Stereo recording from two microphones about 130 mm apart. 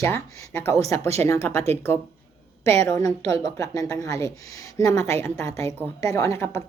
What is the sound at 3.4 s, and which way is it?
A woman's voice, 25° left (ahead or behind).